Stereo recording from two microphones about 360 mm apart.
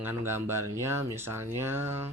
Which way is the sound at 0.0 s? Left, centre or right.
Centre.